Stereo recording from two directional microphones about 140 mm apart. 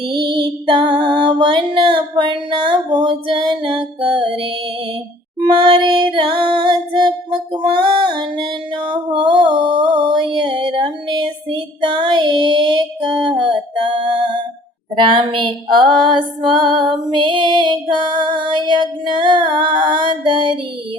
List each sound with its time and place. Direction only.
0.1 s female singing: 35° right (ahead or behind)
5.4 s music: 35° right (ahead or behind)
11.9 s child singing: 35° right (ahead or behind)
13.2 s a sound: 35° right (ahead or behind)
14.9 s female singing: 35° right (ahead or behind)